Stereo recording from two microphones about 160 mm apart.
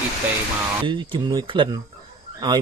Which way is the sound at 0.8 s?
30° right (ahead or behind).